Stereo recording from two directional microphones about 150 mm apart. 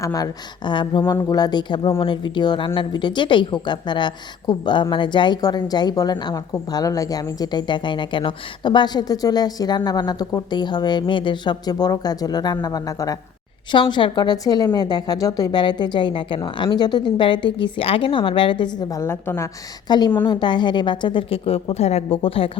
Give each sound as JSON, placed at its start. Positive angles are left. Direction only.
{"t": 0.0, "sound": "speech", "side_deg": 25}
{"t": 19.9, "sound": "a woman's voice", "side_deg": 30}